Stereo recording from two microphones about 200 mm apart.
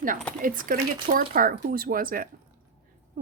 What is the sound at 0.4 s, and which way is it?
A woman's voice, 45° right (ahead or behind).